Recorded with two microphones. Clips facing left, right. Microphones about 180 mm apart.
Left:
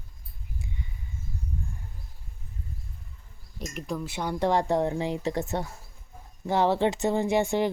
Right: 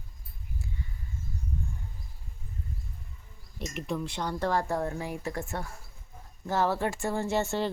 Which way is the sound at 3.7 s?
Centre (ahead or behind).